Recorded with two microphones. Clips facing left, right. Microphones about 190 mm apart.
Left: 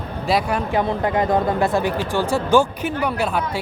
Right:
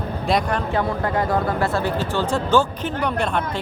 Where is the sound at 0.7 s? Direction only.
20° left (ahead or behind).